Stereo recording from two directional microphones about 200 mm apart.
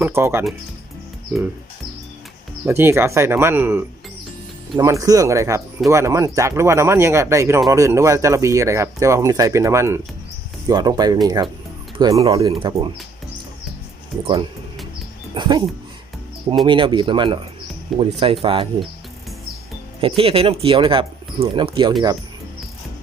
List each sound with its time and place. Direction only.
0.0 s speech: 10° right (ahead or behind)
2.6 s speech: 10° right (ahead or behind)
15.4 s speech: 20° right (ahead or behind)
16.6 s speech: 25° right (ahead or behind)
17.9 s speech: centre (ahead or behind)
18.4 s speech: 25° right (ahead or behind)
20.0 s speech: 25° right (ahead or behind)